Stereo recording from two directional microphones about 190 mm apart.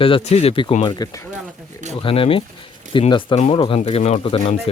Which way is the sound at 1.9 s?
30° left (ahead or behind).